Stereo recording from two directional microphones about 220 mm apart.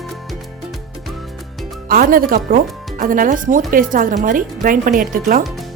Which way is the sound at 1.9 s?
40° right (ahead or behind).